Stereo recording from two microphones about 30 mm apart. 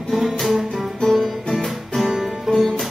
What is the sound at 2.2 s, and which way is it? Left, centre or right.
Music, centre.